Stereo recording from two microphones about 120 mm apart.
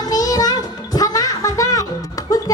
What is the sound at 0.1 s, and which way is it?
Music, 30° left (ahead or behind).